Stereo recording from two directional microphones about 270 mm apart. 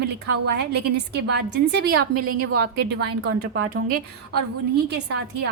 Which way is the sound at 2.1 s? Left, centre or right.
Right.